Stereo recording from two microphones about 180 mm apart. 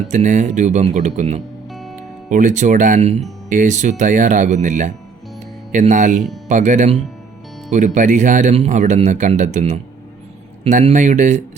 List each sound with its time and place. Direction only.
0.1 s speech: 40° right (ahead or behind)
1.7 s music: centre (ahead or behind)
2.3 s speech: 45° right (ahead or behind)